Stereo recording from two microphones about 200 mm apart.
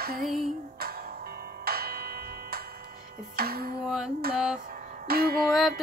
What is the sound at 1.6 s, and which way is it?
Music, 50° right (ahead or behind).